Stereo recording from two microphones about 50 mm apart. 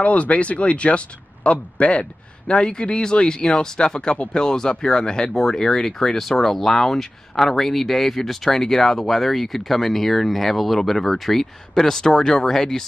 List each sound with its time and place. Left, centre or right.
0.0 s speech: left; by 12.8 s centre